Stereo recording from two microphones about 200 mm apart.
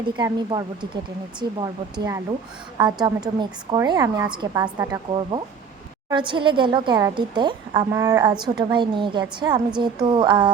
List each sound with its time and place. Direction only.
0.2 s a woman's voice: 20° right (ahead or behind)